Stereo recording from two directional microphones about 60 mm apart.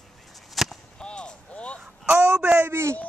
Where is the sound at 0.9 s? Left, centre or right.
Centre.